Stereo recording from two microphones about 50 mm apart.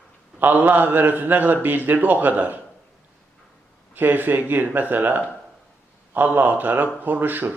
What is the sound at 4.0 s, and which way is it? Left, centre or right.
A man's voice, right.